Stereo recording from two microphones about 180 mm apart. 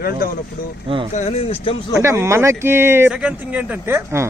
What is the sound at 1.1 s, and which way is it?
Speech, 40° left (ahead or behind).